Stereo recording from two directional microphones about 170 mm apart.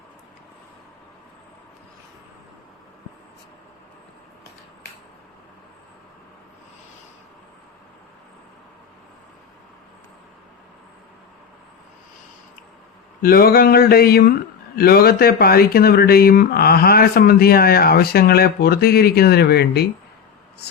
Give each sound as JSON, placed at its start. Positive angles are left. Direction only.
{"t": 13.2, "sound": "speech", "side_deg": 60}